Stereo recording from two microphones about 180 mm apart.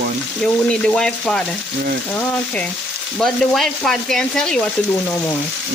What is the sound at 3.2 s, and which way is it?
Speech, 5° left (ahead or behind).